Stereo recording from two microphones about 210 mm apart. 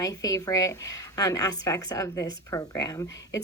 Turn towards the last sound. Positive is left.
turn(degrees=15)  # may be behind; listen again after turning